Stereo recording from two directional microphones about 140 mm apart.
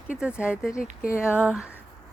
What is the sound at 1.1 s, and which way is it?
Speech, 15° left (ahead or behind).